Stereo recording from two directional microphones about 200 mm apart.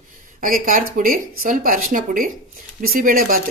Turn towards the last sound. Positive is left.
turn(degrees=-45)  # may be behind; listen again after turning